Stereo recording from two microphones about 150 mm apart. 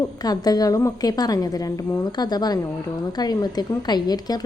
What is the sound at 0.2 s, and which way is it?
A woman's voice, 25° left (ahead or behind).